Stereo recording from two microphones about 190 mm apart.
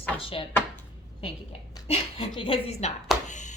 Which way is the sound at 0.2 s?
30° left (ahead or behind).